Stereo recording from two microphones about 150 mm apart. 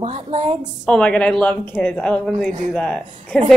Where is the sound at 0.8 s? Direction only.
5° left (ahead or behind).